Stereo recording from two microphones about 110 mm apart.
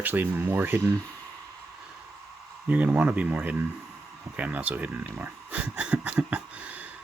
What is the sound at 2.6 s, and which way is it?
Speech, 15° right (ahead or behind).